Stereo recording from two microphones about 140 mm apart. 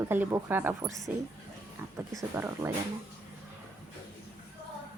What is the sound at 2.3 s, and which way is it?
Speech, 20° right (ahead or behind).